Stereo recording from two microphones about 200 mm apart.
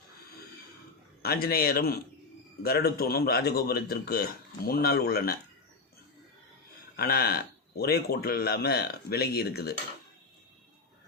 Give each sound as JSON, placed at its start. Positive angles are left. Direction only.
{"t": 1.2, "sound": "a man's voice", "side_deg": 50}
{"t": 6.9, "sound": "a man's voice", "side_deg": 50}